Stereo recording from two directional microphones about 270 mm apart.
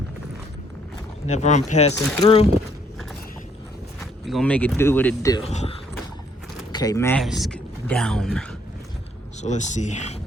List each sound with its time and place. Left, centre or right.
1.3 s speech: left
4.0 s speech: centre
5.5 s speech: left; by 8.4 s centre
9.4 s speech: left